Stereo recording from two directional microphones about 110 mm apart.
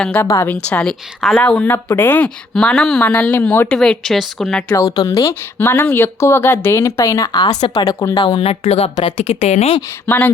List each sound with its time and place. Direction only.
0.0 s a woman's voice: 15° left (ahead or behind)
4.7 s speech: 30° left (ahead or behind)
5.3 s speech: 20° left (ahead or behind)
8.2 s speech: 55° left (ahead or behind)